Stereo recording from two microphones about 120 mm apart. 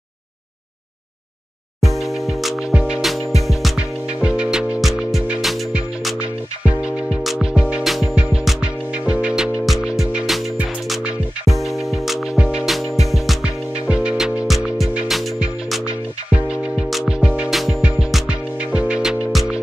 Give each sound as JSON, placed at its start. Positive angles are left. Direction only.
{"t": 2.0, "sound": "music", "side_deg": 0}
{"t": 11.5, "sound": "music", "side_deg": 0}